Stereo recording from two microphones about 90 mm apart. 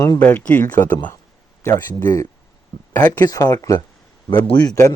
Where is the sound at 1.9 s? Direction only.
35° left (ahead or behind).